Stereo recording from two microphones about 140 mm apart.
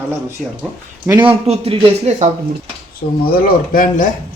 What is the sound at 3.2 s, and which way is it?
Speech, 90° left.